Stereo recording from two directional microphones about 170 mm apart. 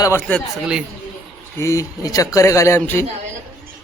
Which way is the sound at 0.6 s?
5° right (ahead or behind).